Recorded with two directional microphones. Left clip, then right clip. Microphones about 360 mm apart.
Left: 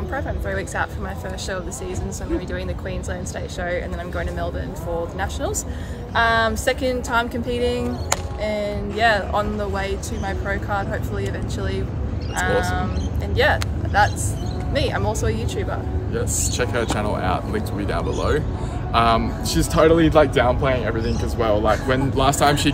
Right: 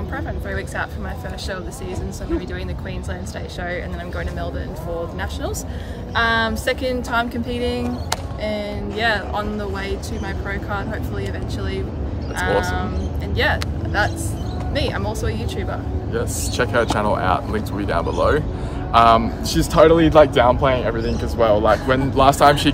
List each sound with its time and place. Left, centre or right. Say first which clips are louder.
0.1 s a woman's voice: left 2 dB; centre
6.1 s a woman's voice: left 1 dB; centre
12.4 s a woman's voice: right 1 dB; centre
16.1 s speech: right 1 dB; centre